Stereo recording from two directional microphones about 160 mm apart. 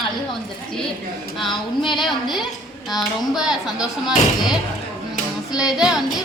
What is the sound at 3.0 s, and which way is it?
Speech, centre (ahead or behind).